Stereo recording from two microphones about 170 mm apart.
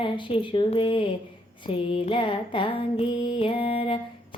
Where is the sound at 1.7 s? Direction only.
30° left (ahead or behind).